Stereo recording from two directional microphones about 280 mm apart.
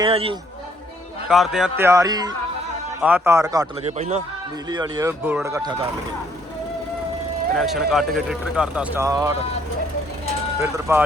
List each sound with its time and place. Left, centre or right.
0.0 s speech: centre
1.3 s speech: centre
3.8 s speech: right
7.5 s speech: centre
10.6 s speech: centre